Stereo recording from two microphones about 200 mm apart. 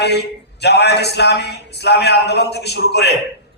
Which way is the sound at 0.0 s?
55° left (ahead or behind).